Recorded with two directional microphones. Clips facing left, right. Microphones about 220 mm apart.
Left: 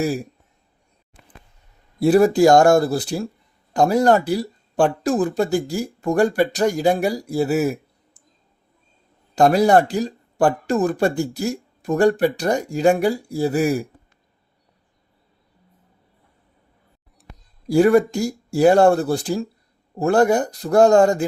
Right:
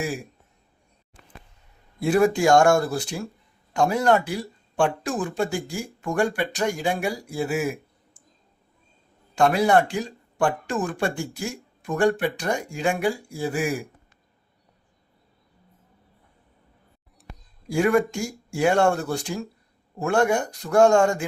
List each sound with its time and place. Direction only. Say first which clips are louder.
0.0 s speech: left 7 dB; 40° left (ahead or behind)
2.0 s speech: left 6 dB; 35° left (ahead or behind)
9.3 s speech: left 5 dB; 40° left (ahead or behind)
17.7 s speech: left 6 dB; 35° left (ahead or behind)